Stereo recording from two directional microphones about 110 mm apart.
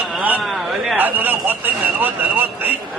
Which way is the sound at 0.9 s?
15° right (ahead or behind).